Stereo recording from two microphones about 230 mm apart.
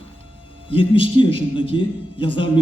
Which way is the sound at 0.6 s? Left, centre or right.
Left.